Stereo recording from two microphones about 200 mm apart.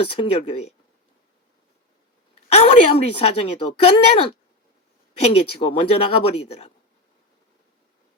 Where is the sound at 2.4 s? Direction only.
30° left (ahead or behind).